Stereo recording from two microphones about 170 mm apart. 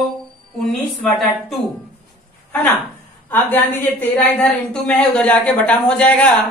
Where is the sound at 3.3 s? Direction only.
10° left (ahead or behind).